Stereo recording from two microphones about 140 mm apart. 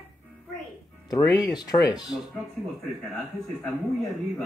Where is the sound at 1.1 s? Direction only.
25° left (ahead or behind).